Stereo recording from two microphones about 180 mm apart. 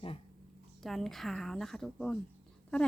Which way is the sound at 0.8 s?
Centre (ahead or behind).